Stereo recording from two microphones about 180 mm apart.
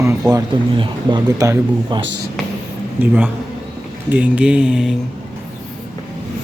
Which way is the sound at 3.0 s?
10° right (ahead or behind).